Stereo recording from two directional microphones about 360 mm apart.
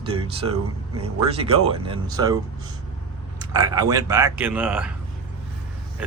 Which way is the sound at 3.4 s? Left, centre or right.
Centre.